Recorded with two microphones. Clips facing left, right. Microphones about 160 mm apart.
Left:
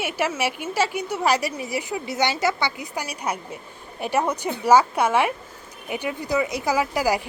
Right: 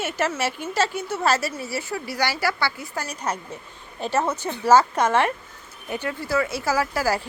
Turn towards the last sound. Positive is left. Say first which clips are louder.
# left 1 dB
turn(degrees=15)  # may be behind; listen again after turning